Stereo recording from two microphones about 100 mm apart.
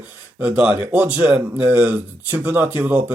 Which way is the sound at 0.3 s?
15° right (ahead or behind).